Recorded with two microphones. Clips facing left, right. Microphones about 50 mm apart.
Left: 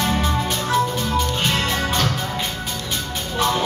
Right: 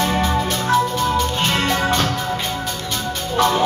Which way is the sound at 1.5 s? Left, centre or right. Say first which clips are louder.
Right 3 dB; right.